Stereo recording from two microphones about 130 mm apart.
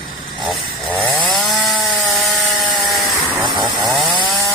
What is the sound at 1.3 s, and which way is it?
Chainsaw, centre (ahead or behind).